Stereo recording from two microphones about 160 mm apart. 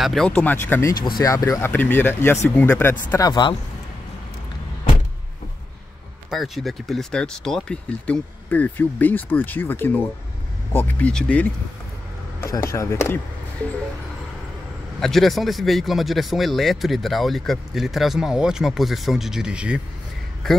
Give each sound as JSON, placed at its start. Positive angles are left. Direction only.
{"t": 0.0, "sound": "speech", "side_deg": 0}
{"t": 0.3, "sound": "speech", "side_deg": 10}
{"t": 3.3, "sound": "speech", "side_deg": 25}
{"t": 6.3, "sound": "speech", "side_deg": 0}
{"t": 12.6, "sound": "speech", "side_deg": 15}
{"t": 15.0, "sound": "a man's voice", "side_deg": 0}